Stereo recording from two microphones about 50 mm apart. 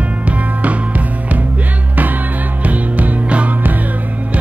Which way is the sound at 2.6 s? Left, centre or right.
Right.